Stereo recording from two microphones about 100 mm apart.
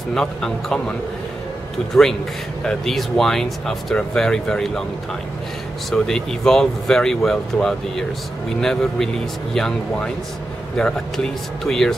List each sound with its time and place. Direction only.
0.1 s speech: 5° left (ahead or behind)
2.6 s speech: 5° left (ahead or behind)
5.9 s speech: 5° left (ahead or behind)